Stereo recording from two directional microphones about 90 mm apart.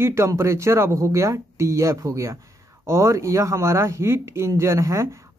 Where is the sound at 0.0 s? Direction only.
30° right (ahead or behind).